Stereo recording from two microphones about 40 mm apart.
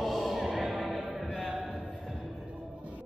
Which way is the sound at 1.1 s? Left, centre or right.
Centre.